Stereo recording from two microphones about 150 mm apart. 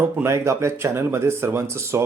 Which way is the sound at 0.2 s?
20° right (ahead or behind).